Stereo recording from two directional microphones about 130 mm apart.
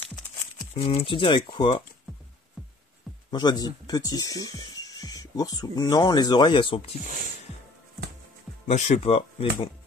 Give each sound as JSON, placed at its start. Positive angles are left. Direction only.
{"t": 0.7, "sound": "speech", "side_deg": 45}
{"t": 2.6, "sound": "music", "side_deg": 0}
{"t": 3.3, "sound": "speech", "side_deg": 30}
{"t": 8.6, "sound": "speech", "side_deg": 60}